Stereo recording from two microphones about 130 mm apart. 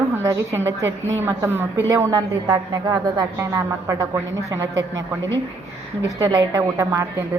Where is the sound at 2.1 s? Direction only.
30° right (ahead or behind).